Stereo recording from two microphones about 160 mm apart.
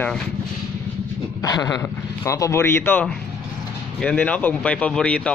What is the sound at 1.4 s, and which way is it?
Speech, 25° left (ahead or behind).